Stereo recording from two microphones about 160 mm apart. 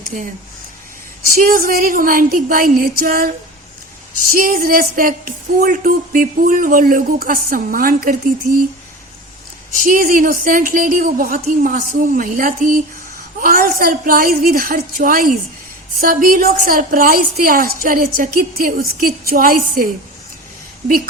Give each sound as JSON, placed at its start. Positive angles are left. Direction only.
{"t": 0.1, "sound": "speech", "side_deg": -60}
{"t": 1.4, "sound": "speech", "side_deg": -60}
{"t": 9.7, "sound": "speech", "side_deg": -60}